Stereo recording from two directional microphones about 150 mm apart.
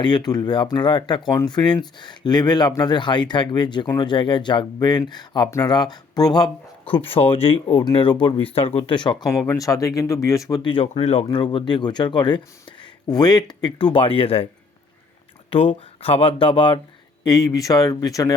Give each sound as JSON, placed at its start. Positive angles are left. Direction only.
{"t": 0.0, "sound": "speech", "side_deg": 30}
{"t": 9.3, "sound": "speech", "side_deg": 20}
{"t": 11.3, "sound": "speech", "side_deg": 30}
{"t": 15.4, "sound": "speech", "side_deg": 40}
{"t": 17.2, "sound": "speech", "side_deg": 25}